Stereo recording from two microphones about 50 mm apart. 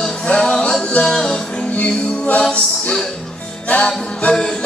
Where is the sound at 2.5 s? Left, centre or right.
Left.